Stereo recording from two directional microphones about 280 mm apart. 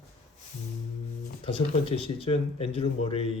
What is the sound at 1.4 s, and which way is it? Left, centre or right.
Speech, centre.